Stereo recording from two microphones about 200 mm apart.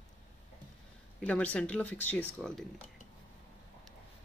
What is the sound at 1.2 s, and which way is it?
Speech, 5° left (ahead or behind).